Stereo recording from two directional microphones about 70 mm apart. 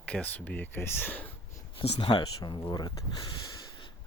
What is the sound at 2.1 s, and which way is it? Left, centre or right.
Speech, left.